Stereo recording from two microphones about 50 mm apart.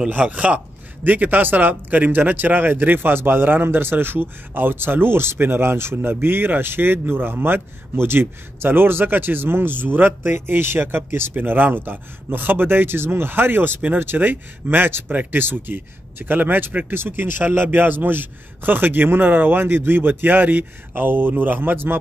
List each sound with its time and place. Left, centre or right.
0.2 s speech: right
15.0 s speech: right